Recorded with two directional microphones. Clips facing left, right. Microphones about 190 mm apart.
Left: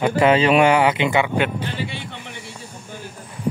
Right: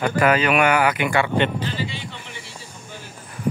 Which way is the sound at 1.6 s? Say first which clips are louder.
Even; 60° left (ahead or behind).